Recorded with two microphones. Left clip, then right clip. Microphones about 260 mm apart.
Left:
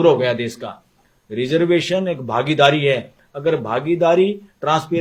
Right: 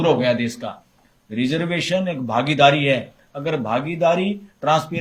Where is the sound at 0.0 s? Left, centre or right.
Left.